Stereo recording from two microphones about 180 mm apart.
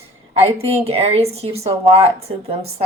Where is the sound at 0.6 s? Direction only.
35° right (ahead or behind).